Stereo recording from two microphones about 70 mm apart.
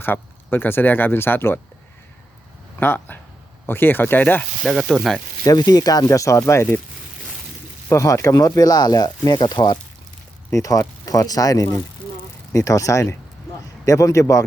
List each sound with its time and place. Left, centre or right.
0.0 s speech: left
2.8 s speech: left
4.6 s speech: centre
5.5 s speech: left
6.1 s speech: left
7.9 s speech: left
10.5 s speech: left